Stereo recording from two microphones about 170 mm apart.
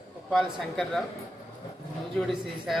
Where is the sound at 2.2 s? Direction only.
Centre (ahead or behind).